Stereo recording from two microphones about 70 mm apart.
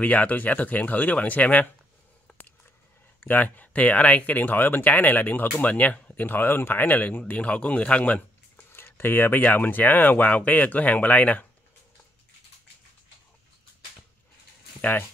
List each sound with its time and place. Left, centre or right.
0.0 s speech: left
2.3 s a sound: centre
3.2 s speech: left
8.7 s speech: left
14.8 s speech: left